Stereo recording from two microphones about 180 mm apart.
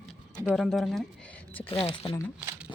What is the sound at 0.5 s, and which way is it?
Speech, centre (ahead or behind).